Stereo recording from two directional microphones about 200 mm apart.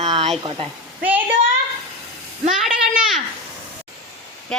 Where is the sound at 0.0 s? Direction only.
30° right (ahead or behind).